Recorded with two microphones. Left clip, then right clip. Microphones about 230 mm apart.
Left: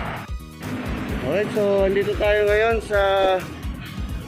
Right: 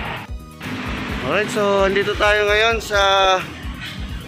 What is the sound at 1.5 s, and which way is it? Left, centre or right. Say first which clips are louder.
Speech: right 2 dB; right.